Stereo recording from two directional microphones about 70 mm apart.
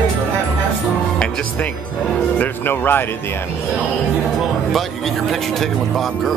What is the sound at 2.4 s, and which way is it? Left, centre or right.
Music, left.